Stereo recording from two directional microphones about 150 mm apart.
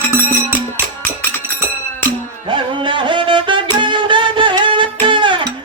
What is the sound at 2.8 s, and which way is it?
Music, 35° right (ahead or behind).